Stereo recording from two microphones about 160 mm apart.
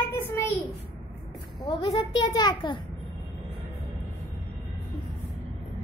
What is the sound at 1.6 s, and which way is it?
A child's voice, 25° left (ahead or behind).